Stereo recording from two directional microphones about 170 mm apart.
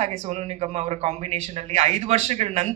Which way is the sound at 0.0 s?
45° right (ahead or behind).